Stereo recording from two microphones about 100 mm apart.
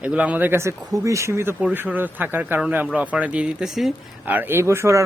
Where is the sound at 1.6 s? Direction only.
15° right (ahead or behind).